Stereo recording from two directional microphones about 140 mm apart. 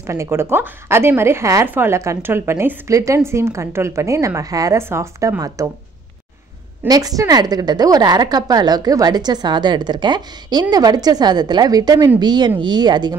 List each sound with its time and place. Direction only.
0.0 s a woman's voice: 20° right (ahead or behind)
6.9 s a woman's voice: 25° right (ahead or behind)